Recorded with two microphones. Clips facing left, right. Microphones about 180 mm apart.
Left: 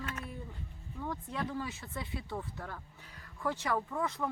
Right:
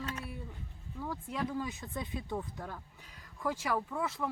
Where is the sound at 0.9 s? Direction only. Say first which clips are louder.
Right 1 dB; 5° right (ahead or behind).